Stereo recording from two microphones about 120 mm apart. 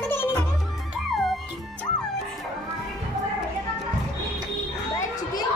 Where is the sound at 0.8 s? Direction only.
Centre (ahead or behind).